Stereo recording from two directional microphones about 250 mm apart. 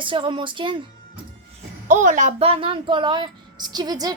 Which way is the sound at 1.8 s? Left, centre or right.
Right.